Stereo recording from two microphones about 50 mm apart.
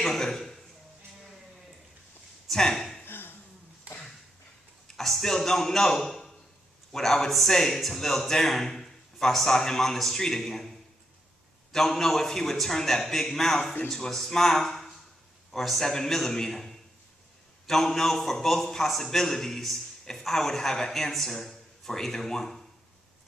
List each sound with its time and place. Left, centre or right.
0.0 s a man's voice: centre
2.4 s speech: centre
3.1 s a sound: left
4.8 s a man's voice: centre